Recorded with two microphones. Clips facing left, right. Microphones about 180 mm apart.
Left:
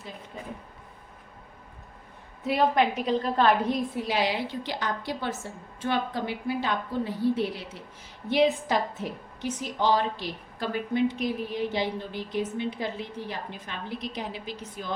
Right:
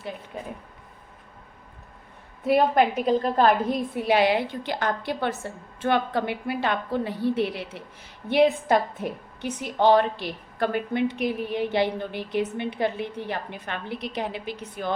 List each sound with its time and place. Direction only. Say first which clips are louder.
2.4 s a woman's voice: right 4 dB; 50° right (ahead or behind)
3.9 s a woman's voice: right 6 dB; 60° right (ahead or behind)